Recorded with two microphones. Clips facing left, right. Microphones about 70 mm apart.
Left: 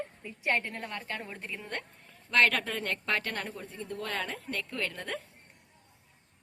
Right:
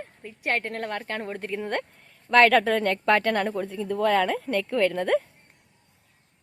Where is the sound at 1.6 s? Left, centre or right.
Right.